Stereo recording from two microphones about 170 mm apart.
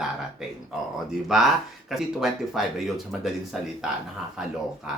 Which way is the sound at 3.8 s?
Centre (ahead or behind).